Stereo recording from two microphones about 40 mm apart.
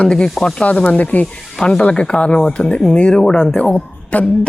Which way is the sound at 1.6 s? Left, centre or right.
Centre.